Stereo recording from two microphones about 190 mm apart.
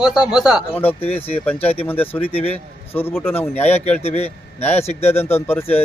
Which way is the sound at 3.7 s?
35° left (ahead or behind).